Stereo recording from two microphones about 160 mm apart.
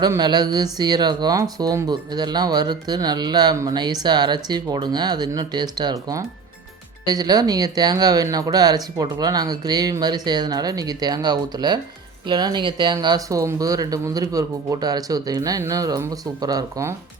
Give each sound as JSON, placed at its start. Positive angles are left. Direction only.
{"t": 0.0, "sound": "speech", "side_deg": -25}